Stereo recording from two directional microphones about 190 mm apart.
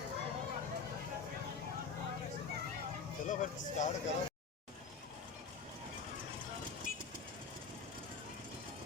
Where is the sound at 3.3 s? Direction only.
40° left (ahead or behind).